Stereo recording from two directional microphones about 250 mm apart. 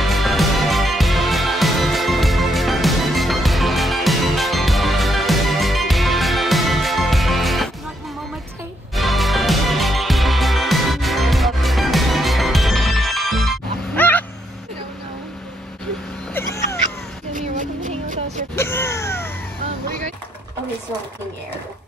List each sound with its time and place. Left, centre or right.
0.0 s music: centre
8.9 s music: centre
17.3 s music: right
18.6 s a sound: centre